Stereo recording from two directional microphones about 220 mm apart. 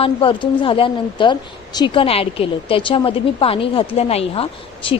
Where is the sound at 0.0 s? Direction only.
25° left (ahead or behind).